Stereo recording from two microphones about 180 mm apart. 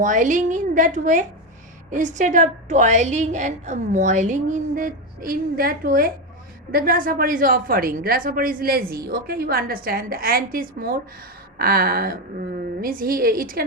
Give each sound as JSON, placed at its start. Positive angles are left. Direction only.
{"t": 0.0, "sound": "a woman's voice", "side_deg": -45}
{"t": 11.5, "sound": "a sound", "side_deg": -55}
{"t": 12.8, "sound": "a woman's voice", "side_deg": -55}